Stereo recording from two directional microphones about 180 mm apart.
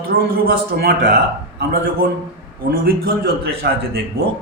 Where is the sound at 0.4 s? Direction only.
60° right (ahead or behind).